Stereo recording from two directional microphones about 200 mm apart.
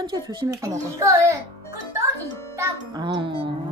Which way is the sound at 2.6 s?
20° right (ahead or behind).